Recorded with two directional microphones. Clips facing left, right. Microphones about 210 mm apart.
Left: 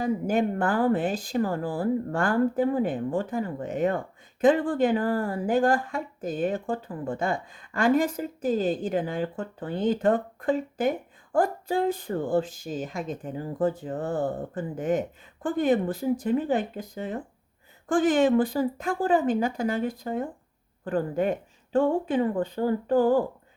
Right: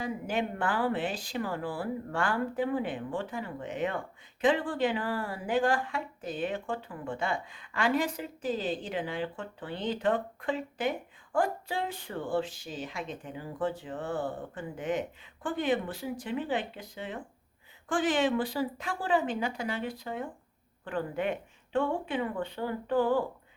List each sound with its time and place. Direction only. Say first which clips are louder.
0.0 s speech: left 7 dB; 45° left (ahead or behind)